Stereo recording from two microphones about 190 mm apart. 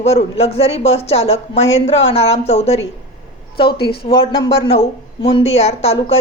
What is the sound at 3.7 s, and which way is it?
Speech, 55° left (ahead or behind).